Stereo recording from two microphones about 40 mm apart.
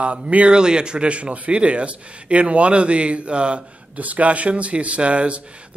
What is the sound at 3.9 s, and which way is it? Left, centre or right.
Speech, right.